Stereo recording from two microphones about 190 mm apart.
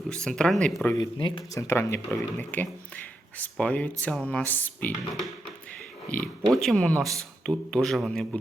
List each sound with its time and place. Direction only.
0.1 s speech: 5° left (ahead or behind)
0.9 s speech: 20° left (ahead or behind); by 8.4 s 5° left (ahead or behind)